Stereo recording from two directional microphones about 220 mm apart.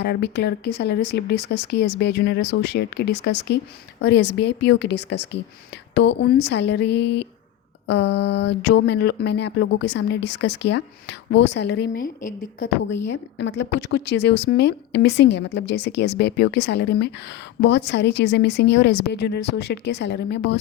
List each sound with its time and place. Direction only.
0.0 s a woman's voice: 50° left (ahead or behind)
12.2 s a woman's voice: 40° left (ahead or behind)
13.4 s a woman's voice: 50° left (ahead or behind)